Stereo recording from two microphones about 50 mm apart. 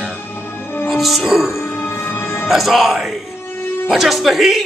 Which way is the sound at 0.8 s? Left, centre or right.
Centre.